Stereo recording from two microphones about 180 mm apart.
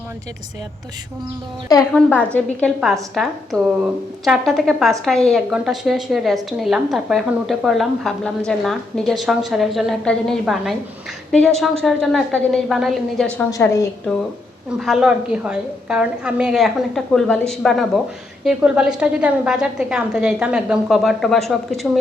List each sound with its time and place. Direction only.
1.9 s a woman's voice: 5° left (ahead or behind)
13.5 s a woman's voice: 15° left (ahead or behind)
14.1 s a woman's voice: centre (ahead or behind)